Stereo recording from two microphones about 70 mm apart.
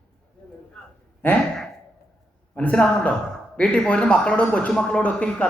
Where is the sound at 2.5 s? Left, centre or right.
Centre.